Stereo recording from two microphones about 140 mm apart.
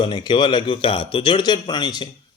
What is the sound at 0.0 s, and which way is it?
A man's voice, 35° left (ahead or behind).